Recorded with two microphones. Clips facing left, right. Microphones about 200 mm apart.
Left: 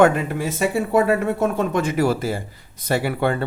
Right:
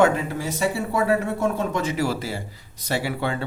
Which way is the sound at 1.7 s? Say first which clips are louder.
Left 4 dB; 55° left (ahead or behind).